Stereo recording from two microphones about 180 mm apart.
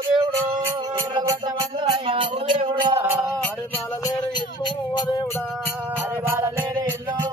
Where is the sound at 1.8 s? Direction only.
25° right (ahead or behind).